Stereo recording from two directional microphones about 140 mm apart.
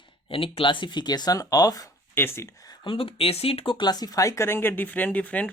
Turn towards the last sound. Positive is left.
turn(degrees=10)  # may be behind; listen again after turning